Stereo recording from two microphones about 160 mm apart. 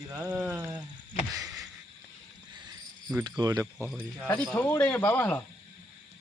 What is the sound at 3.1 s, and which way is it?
Speech, 25° right (ahead or behind).